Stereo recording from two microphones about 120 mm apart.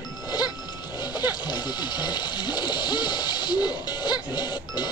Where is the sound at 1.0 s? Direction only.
35° left (ahead or behind).